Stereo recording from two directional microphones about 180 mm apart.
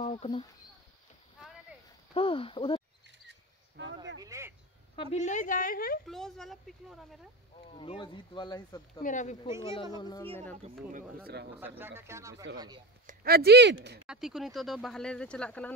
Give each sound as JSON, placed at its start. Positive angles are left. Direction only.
{"t": 0.0, "sound": "speech", "side_deg": 35}
{"t": 2.1, "sound": "speech", "side_deg": 30}
{"t": 3.3, "sound": "cricket", "side_deg": -75}
{"t": 4.2, "sound": "a sound", "side_deg": -15}
{"t": 4.9, "sound": "a woman's voice", "side_deg": 40}
{"t": 6.0, "sound": "speech", "side_deg": 0}
{"t": 7.7, "sound": "speech", "side_deg": 30}
{"t": 9.0, "sound": "a woman's voice", "side_deg": 45}
{"t": 9.6, "sound": "speech", "side_deg": 30}
{"t": 10.2, "sound": "speech", "side_deg": 10}
{"t": 10.6, "sound": "speech", "side_deg": -45}
{"t": 11.6, "sound": "speech", "side_deg": -10}
{"t": 13.0, "sound": "speech", "side_deg": -55}
{"t": 14.0, "sound": "speech", "side_deg": -5}